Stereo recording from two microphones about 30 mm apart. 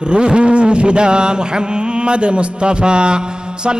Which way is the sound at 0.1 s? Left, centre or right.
Right.